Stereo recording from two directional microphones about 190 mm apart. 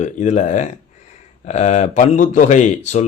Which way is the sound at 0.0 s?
40° left (ahead or behind).